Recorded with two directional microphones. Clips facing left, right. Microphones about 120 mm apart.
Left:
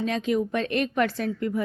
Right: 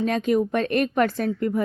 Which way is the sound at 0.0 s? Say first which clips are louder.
Right 4 dB; 50° right (ahead or behind).